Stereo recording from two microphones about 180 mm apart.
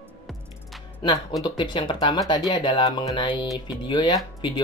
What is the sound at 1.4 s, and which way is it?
Speech, 25° left (ahead or behind).